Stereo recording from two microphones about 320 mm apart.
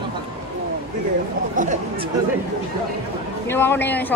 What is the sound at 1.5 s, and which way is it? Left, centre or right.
Chatter, right.